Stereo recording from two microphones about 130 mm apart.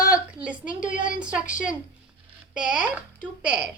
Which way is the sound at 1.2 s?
10° right (ahead or behind).